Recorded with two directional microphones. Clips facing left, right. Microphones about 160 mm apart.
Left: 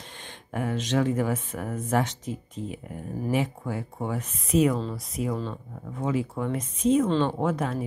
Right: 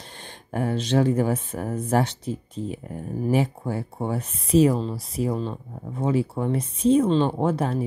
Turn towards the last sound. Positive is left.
turn(degrees=-30)  # may be behind; listen again after turning